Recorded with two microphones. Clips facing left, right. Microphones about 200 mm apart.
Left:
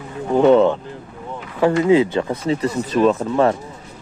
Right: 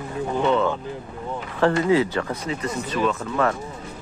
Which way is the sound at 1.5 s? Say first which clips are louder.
Left 5 dB; 15° left (ahead or behind).